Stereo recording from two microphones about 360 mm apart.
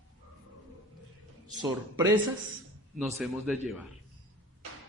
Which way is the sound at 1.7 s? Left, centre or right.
Centre.